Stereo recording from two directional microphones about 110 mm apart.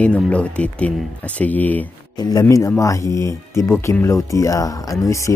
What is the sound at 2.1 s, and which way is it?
Speech, 40° left (ahead or behind).